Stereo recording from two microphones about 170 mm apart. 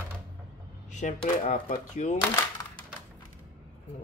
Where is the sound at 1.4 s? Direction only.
45° left (ahead or behind).